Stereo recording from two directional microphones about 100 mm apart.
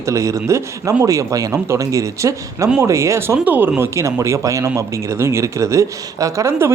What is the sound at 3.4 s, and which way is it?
Speech, 20° right (ahead or behind).